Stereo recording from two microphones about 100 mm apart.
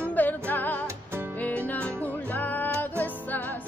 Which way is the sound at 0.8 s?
25° right (ahead or behind).